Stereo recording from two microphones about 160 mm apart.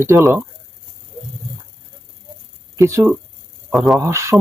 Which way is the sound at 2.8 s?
20° right (ahead or behind).